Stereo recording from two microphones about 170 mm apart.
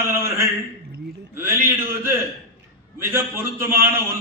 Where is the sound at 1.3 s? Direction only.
15° right (ahead or behind).